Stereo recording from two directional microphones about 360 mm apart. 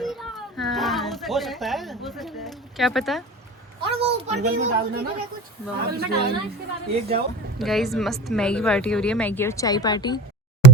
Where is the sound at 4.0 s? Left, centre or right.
Centre.